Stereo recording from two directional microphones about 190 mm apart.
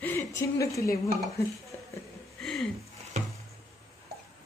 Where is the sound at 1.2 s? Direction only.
15° left (ahead or behind).